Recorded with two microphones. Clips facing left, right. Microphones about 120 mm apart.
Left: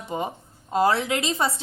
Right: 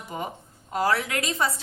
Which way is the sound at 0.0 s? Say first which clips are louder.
Left 4 dB; 25° left (ahead or behind).